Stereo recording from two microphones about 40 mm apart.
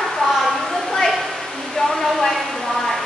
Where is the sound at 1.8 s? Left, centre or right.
Centre.